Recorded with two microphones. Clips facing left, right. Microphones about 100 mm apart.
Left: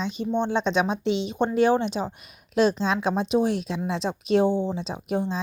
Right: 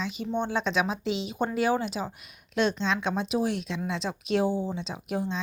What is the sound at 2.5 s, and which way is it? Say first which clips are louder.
Speech: left 5 dB; 40° left (ahead or behind).